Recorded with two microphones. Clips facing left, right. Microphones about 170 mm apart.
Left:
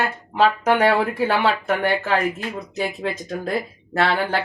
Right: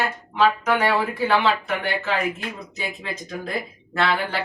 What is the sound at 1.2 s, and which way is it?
Speech, 45° left (ahead or behind).